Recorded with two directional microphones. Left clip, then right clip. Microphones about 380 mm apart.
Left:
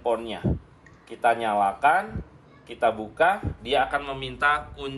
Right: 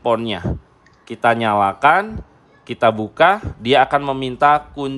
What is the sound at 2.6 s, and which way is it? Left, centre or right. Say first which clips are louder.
Speech: right 8 dB; right.